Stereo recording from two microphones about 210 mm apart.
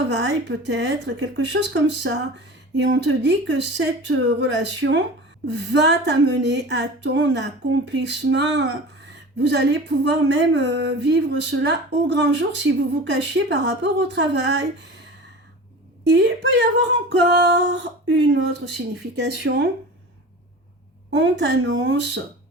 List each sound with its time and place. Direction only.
0.1 s speech: 55° right (ahead or behind)
16.0 s speech: 55° right (ahead or behind)
21.1 s speech: 60° right (ahead or behind)